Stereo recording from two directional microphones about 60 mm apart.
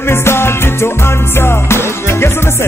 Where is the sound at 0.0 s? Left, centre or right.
Left.